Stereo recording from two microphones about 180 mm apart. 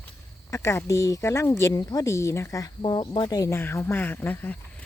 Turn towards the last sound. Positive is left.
turn(degrees=10)  # may be behind; listen again after turning